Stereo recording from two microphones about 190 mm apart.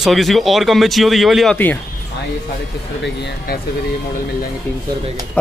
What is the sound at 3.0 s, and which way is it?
Speech, 65° left (ahead or behind).